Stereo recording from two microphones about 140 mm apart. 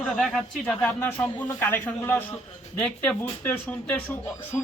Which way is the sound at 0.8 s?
15° left (ahead or behind).